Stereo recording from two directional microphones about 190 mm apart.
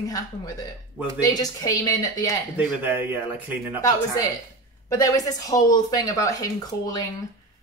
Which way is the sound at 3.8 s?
15° left (ahead or behind).